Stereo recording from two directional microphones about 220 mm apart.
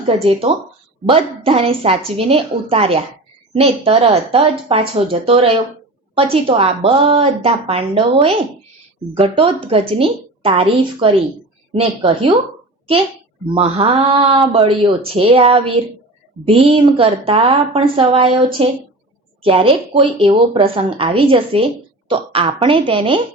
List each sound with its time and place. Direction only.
1.0 s speech: 25° right (ahead or behind)
13.5 s speech: 25° right (ahead or behind)